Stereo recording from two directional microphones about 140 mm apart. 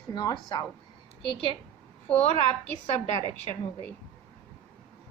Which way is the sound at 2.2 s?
45° left (ahead or behind).